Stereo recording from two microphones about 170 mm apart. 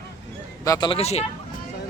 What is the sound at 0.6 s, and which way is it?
Speech, 25° left (ahead or behind).